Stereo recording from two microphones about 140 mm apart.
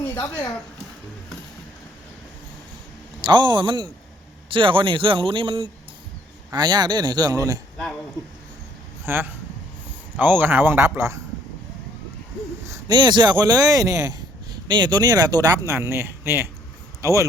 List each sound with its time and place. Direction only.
0.2 s speech: 20° left (ahead or behind)
3.2 s a man's voice: 35° right (ahead or behind)
9.0 s speech: 15° right (ahead or behind)
12.9 s speech: 30° right (ahead or behind)